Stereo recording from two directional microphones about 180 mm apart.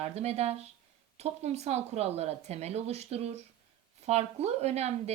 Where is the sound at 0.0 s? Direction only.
35° right (ahead or behind).